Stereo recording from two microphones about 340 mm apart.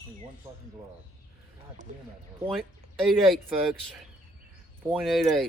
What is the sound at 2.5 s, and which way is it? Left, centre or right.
Speech, centre.